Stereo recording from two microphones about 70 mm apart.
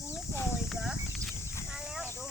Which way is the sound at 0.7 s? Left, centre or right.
Centre.